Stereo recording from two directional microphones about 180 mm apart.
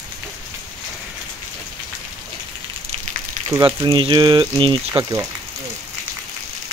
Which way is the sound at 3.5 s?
20° right (ahead or behind).